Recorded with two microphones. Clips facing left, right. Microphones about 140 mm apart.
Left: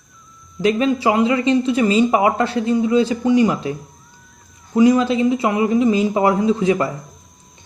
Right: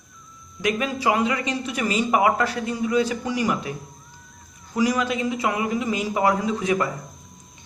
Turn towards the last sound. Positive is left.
turn(degrees=30)  # may be behind; listen again after turning